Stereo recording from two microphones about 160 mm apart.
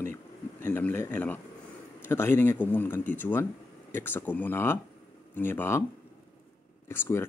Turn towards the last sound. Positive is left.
turn(degrees=15)  # may be behind; listen again after turning